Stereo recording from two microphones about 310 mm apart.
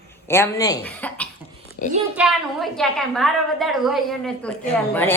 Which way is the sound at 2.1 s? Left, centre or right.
Centre.